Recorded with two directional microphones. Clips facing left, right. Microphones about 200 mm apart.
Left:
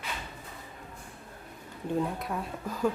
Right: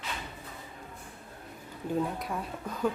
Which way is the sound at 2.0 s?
Centre (ahead or behind).